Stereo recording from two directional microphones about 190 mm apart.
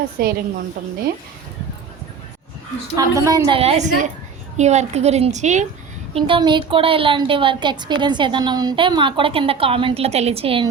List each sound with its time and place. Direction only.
0.2 s a woman's voice: 55° right (ahead or behind)
2.9 s a woman's voice: 15° right (ahead or behind)
3.6 s a woman's voice: 35° right (ahead or behind)
6.1 s a woman's voice: 25° right (ahead or behind)